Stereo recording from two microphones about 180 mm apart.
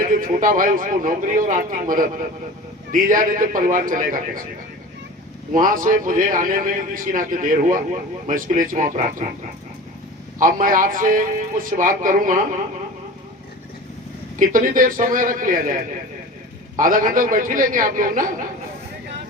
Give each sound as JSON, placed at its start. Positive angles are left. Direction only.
{"t": 0.0, "sound": "a man's voice", "side_deg": -50}
{"t": 5.5, "sound": "a man's voice", "side_deg": -50}
{"t": 10.4, "sound": "a man's voice", "side_deg": -50}
{"t": 14.3, "sound": "a man's voice", "side_deg": -50}